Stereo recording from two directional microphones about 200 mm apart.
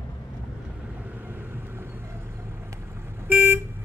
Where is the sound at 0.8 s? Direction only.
5° right (ahead or behind).